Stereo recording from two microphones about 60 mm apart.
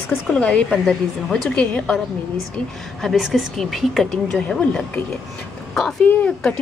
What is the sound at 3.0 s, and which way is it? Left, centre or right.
A woman's voice, centre.